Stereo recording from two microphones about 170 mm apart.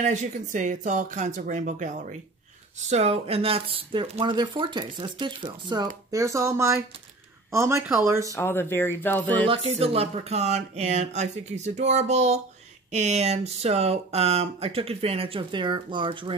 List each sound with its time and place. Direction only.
0.0 s speech: 45° right (ahead or behind); by 8.3 s 15° right (ahead or behind)
8.3 s speech: 15° left (ahead or behind)
9.5 s speech: 35° right (ahead or behind)